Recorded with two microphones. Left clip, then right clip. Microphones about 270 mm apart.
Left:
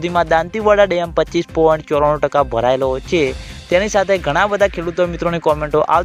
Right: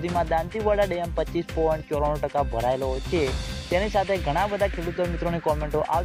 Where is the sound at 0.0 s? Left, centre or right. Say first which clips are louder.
Left 10 dB; left.